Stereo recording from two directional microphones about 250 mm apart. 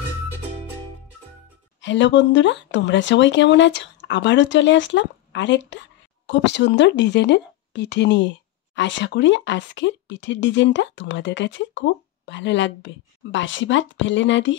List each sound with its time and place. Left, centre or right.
1.8 s speech: left